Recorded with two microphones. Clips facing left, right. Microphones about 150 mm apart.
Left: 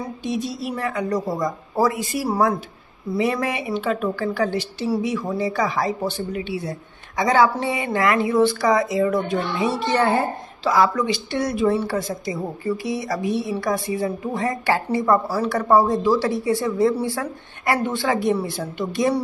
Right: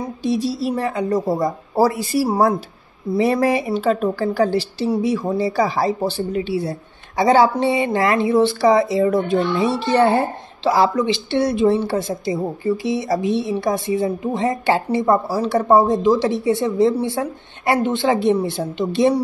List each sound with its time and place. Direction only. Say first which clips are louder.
0.2 s speech: right 7 dB; 35° right (ahead or behind)